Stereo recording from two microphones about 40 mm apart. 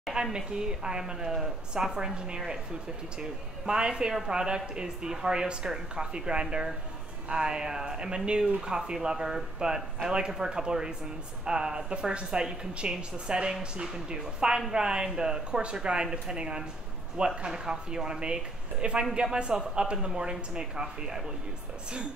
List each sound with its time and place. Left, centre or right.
0.1 s a woman's voice: centre